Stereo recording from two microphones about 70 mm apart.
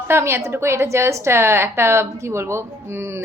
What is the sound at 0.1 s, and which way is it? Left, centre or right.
A woman's voice, right.